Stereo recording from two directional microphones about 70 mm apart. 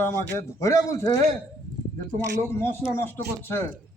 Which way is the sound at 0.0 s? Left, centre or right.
Left.